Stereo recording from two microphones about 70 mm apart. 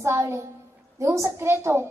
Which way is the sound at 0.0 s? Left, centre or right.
Right.